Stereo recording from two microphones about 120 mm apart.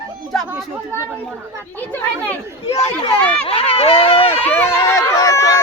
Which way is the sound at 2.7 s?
30° left (ahead or behind).